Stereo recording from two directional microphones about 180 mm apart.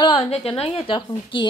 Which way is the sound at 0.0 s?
30° left (ahead or behind).